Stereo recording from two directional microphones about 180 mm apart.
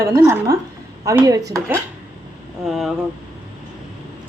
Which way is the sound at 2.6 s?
Centre (ahead or behind).